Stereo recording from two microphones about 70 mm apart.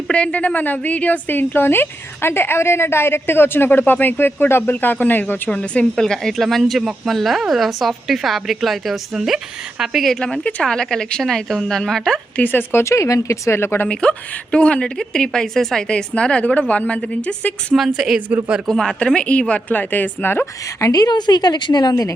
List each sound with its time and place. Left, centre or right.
0.1 s a woman's voice: centre
5.5 s speech: centre
5.8 s a woman's voice: centre
12.4 s a woman's voice: left
12.8 s speech: left
13.8 s speech: centre
17.7 s a woman's voice: centre
18.4 s a man's voice: centre
18.7 s speech: centre; by 20.5 s left
20.8 s a woman's voice: left